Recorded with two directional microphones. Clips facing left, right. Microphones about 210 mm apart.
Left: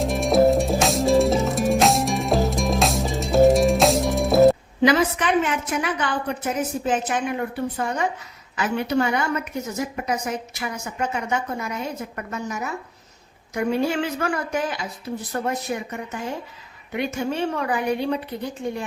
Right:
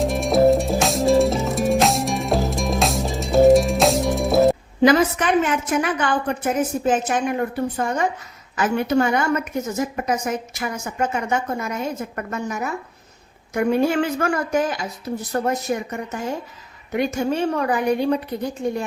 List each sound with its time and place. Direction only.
0.0 s music: centre (ahead or behind)
4.8 s a woman's voice: 45° right (ahead or behind)